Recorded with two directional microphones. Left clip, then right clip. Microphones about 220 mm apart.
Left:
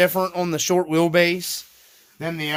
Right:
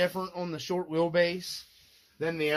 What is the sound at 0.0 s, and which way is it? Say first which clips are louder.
Speech: left 11 dB; 50° left (ahead or behind).